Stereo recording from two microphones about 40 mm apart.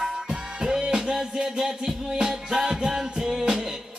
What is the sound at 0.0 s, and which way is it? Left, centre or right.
Music, centre.